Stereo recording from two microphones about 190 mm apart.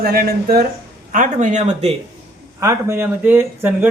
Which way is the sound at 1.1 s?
40° right (ahead or behind).